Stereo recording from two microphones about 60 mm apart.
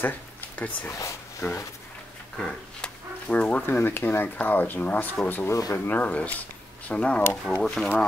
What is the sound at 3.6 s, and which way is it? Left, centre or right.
Speech, left.